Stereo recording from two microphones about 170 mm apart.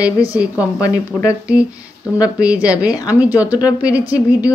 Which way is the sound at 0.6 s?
20° left (ahead or behind).